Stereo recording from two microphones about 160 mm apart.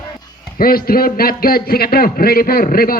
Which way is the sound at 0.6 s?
70° left (ahead or behind).